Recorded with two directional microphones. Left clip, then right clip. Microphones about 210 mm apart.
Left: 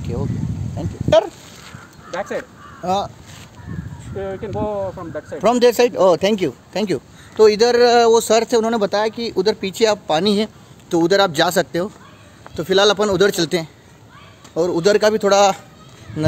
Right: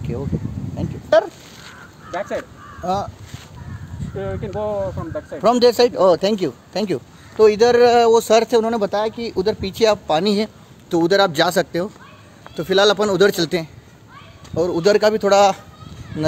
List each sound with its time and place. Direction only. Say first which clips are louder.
0.7 s speech: left 1 dB; 15° left (ahead or behind)
2.0 s speech: even; 35° left (ahead or behind)
2.8 s speech: left 2 dB; 15° left (ahead or behind)
4.2 s speech: left 1 dB; centre (ahead or behind)